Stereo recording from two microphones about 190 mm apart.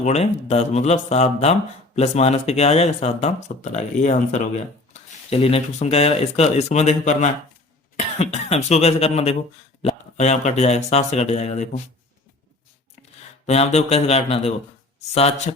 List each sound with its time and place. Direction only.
0.0 s speech: 35° left (ahead or behind)
13.5 s speech: 35° left (ahead or behind)